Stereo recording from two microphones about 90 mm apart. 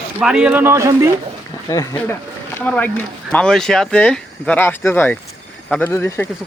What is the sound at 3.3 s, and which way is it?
Speech, 5° left (ahead or behind).